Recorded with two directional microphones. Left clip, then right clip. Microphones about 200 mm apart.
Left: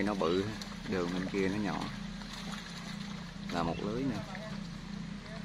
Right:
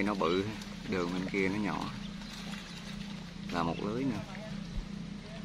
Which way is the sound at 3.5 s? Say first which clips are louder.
Right 1 dB; 5° right (ahead or behind).